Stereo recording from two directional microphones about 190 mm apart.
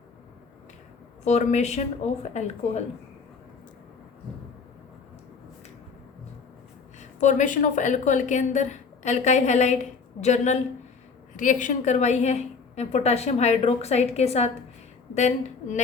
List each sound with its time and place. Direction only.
1.2 s a woman's voice: 35° left (ahead or behind)
7.0 s a woman's voice: 40° left (ahead or behind)